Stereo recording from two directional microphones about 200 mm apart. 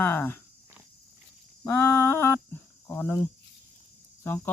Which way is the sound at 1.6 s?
10° left (ahead or behind).